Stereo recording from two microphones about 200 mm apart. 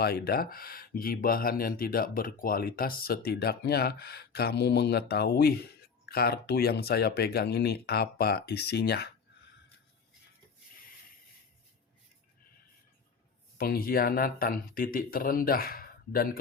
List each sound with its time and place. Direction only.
0.0 s speech: 50° left (ahead or behind)
13.6 s speech: 50° left (ahead or behind)